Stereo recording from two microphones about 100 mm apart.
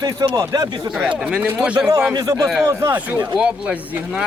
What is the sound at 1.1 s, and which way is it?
Speech, 10° right (ahead or behind).